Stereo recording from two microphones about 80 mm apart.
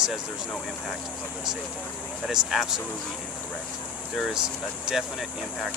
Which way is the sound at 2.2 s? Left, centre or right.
Centre.